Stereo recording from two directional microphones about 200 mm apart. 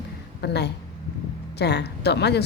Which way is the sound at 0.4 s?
55° left (ahead or behind).